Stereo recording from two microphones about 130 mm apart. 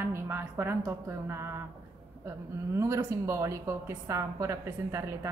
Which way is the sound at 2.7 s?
20° right (ahead or behind).